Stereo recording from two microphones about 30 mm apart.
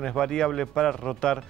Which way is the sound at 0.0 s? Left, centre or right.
Left.